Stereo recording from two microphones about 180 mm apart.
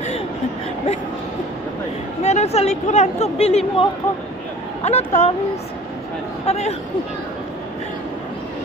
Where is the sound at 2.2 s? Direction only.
40° left (ahead or behind).